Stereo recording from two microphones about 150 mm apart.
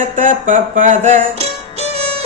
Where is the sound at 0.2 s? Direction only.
60° right (ahead or behind).